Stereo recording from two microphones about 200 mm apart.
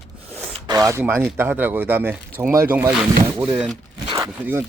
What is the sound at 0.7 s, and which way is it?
Speech, 15° right (ahead or behind).